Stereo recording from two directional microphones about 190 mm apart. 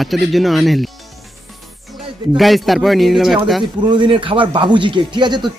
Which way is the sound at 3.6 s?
25° right (ahead or behind).